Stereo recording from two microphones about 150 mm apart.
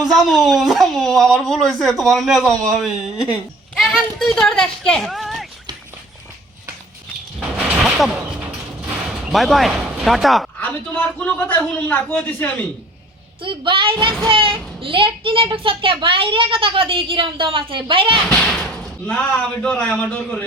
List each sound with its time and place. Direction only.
0.0 s speech: centre (ahead or behind)
7.3 s a sound: 10° right (ahead or behind)
9.0 s speech: centre (ahead or behind)
13.4 s a child's voice: 35° right (ahead or behind)
18.3 s speech: 5° left (ahead or behind)